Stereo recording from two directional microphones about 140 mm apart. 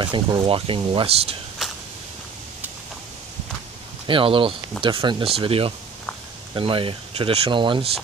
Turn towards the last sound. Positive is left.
turn(degrees=-35)  # may be behind; listen again after turning